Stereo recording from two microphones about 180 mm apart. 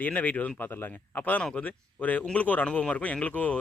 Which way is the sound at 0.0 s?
10° left (ahead or behind).